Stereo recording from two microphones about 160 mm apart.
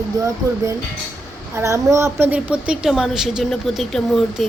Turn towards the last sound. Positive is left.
turn(degrees=0)  # may be behind; listen again after turning